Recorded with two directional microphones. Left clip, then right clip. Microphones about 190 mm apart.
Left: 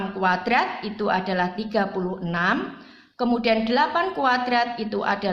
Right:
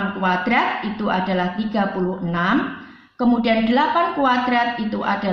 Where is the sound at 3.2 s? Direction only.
40° left (ahead or behind).